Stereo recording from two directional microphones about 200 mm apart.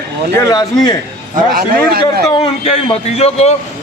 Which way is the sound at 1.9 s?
50° right (ahead or behind).